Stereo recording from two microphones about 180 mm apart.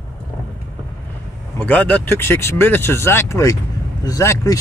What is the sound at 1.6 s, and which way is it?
Speech, 10° left (ahead or behind).